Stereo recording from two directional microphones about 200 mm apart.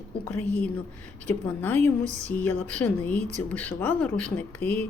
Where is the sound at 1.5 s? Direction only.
10° left (ahead or behind).